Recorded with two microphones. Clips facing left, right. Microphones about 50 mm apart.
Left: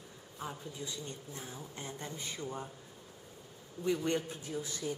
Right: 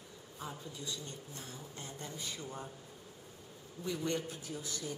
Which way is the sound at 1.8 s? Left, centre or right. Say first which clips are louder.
Left 2 dB; left.